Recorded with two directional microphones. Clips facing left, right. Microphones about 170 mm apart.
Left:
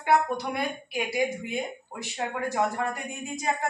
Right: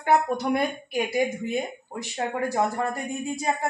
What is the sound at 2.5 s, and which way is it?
Speech, 35° right (ahead or behind).